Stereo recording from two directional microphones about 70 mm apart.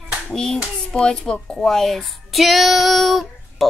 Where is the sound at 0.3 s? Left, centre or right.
Centre.